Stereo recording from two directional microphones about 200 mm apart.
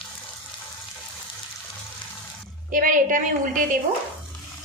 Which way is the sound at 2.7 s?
40° right (ahead or behind).